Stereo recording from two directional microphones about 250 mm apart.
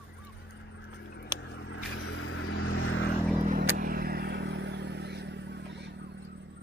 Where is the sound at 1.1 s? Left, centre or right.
Left.